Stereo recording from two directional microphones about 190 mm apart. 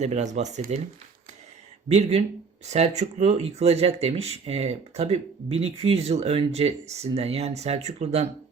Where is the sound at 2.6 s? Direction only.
35° right (ahead or behind).